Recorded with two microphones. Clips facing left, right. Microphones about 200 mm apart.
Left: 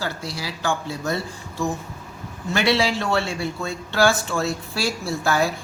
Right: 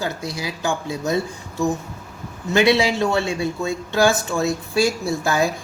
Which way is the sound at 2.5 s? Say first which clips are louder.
Right 4 dB; 20° right (ahead or behind).